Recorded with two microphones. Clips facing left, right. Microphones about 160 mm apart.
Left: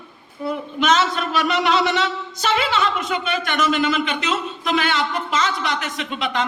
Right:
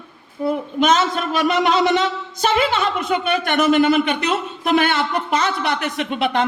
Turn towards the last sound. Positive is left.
turn(degrees=-60)  # may be behind; listen again after turning